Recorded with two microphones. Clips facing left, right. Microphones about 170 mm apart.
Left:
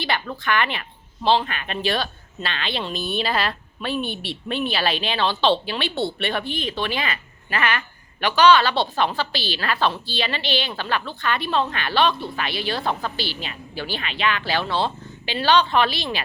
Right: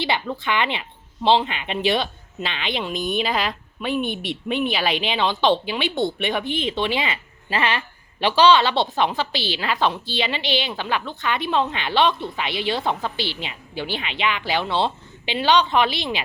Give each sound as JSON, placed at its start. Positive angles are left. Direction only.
{"t": 0.0, "sound": "speech", "side_deg": -20}